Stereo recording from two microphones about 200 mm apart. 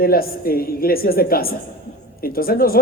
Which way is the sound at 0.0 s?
45° left (ahead or behind).